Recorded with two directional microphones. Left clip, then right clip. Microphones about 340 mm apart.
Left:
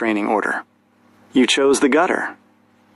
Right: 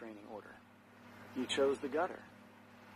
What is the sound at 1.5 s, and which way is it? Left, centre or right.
Speech, left.